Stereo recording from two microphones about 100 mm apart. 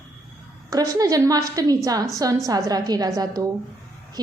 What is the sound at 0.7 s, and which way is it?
A woman's voice, 35° right (ahead or behind).